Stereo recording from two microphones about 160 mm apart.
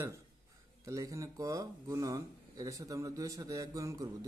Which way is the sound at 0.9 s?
20° right (ahead or behind).